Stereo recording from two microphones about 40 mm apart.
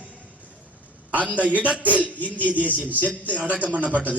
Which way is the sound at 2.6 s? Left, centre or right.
Right.